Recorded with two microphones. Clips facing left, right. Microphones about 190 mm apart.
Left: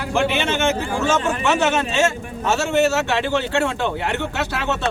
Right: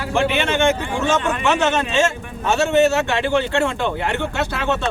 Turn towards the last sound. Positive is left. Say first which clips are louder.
# right 3 dB
turn(degrees=0)  # may be behind; listen again after turning